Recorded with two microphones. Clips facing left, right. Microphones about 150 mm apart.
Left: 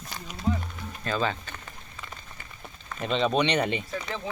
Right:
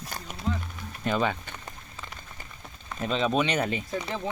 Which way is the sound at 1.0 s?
15° right (ahead or behind).